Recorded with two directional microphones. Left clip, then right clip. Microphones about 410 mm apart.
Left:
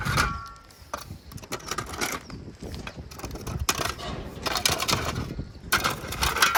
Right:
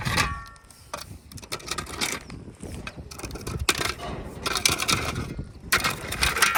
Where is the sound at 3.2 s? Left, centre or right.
Centre.